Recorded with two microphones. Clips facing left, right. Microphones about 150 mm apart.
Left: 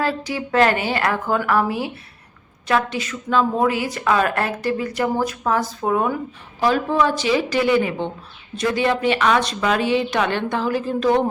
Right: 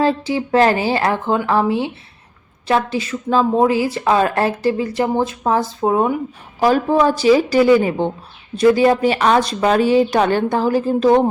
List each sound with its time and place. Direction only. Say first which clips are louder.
0.0 s a woman's voice: right 6 dB; 25° right (ahead or behind)
6.6 s a woman's voice: right 4 dB; 40° right (ahead or behind)